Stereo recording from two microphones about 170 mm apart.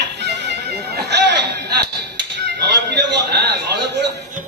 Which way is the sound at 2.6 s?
75° right (ahead or behind).